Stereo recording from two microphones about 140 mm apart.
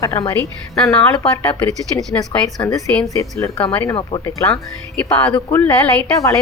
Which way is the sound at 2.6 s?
15° left (ahead or behind).